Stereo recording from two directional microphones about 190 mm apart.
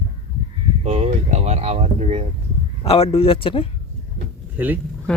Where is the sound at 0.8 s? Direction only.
35° right (ahead or behind).